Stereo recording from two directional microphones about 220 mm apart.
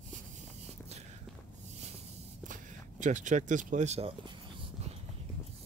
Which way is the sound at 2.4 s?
35° right (ahead or behind).